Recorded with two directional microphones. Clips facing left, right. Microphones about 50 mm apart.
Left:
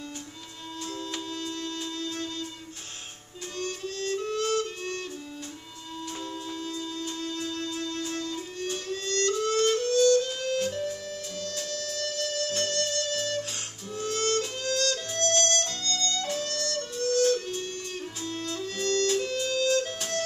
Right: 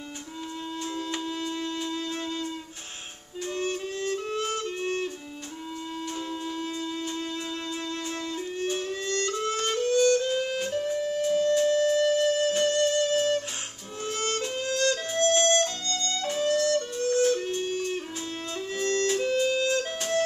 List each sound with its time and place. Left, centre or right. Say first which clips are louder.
1.1 s music: right 3 dB; right
3.5 s music: right 3 dB; right
7.7 s music: even; right